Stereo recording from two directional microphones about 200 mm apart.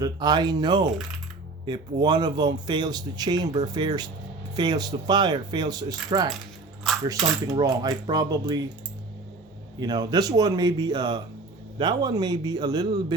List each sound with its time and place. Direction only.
0.0 s speech: 20° right (ahead or behind)
7.6 s speech: 20° right (ahead or behind)
9.8 s speech: 20° right (ahead or behind)